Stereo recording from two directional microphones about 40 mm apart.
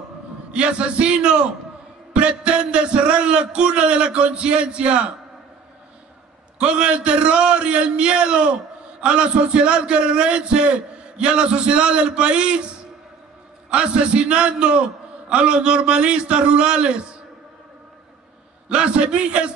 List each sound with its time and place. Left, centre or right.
0.5 s a man's voice: right
6.6 s a man's voice: right
18.7 s a man's voice: right